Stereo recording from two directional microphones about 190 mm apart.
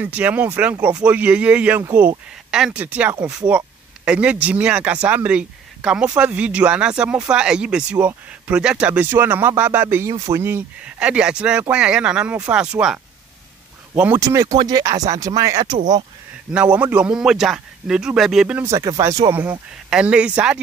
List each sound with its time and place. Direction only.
0.0 s speech: 10° right (ahead or behind)
16.7 s speech: 10° right (ahead or behind)
19.9 s speech: 5° right (ahead or behind)